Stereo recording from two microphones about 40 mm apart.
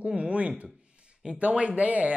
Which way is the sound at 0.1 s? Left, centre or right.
Right.